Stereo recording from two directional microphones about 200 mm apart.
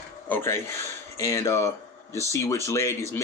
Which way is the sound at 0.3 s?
10° left (ahead or behind).